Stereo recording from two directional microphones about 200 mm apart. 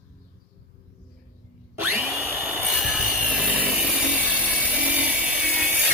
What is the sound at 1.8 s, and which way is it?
Tools, 5° right (ahead or behind).